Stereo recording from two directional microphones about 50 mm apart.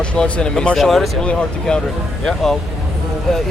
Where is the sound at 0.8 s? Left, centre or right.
Centre.